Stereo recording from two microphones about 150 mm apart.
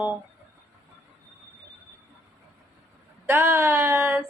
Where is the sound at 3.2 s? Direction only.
15° right (ahead or behind).